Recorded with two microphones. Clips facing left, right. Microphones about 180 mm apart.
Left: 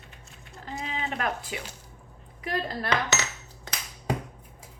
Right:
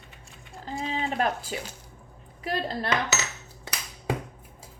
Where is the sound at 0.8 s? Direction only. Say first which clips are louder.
Right 4 dB; 35° right (ahead or behind).